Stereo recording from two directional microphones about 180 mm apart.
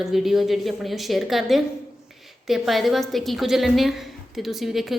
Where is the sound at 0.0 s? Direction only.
Centre (ahead or behind).